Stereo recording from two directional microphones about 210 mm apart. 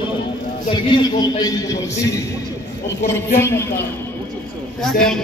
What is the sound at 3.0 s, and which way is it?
Speech, 10° left (ahead or behind).